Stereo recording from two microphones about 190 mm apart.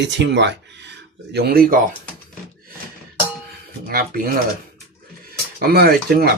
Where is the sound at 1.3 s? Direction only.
55° right (ahead or behind).